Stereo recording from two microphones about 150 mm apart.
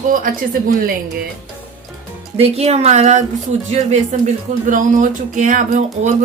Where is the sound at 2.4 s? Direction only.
45° right (ahead or behind).